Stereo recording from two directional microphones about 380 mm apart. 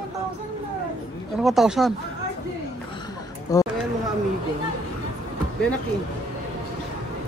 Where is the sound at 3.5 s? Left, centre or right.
Centre.